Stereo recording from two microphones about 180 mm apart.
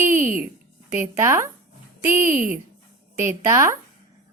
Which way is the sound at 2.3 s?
50° right (ahead or behind).